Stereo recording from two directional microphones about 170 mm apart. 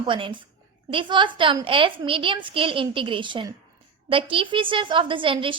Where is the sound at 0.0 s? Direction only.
30° right (ahead or behind).